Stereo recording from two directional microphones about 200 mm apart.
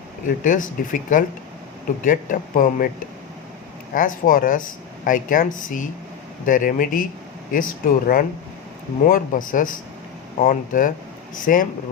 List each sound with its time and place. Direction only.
0.3 s speech: 40° left (ahead or behind)
3.9 s speech: 45° left (ahead or behind)